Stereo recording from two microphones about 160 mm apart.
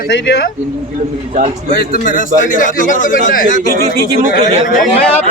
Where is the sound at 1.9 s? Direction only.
55° left (ahead or behind).